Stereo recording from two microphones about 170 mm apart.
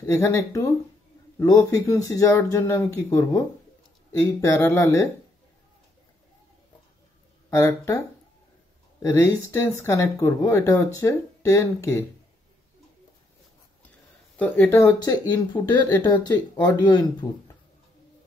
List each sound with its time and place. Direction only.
0.0 s speech: 15° left (ahead or behind)
7.4 s speech: 15° left (ahead or behind)
9.0 s speech: 15° left (ahead or behind)
14.3 s speech: 10° left (ahead or behind)